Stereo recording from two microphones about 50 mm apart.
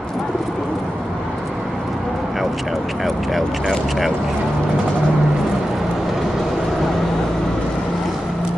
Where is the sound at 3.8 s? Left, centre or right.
Centre.